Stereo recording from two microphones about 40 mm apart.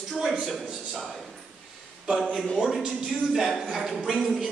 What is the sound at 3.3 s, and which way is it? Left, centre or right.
Speech, centre.